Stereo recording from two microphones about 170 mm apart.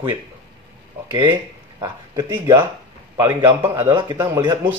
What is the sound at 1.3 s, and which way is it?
Speech, 20° right (ahead or behind).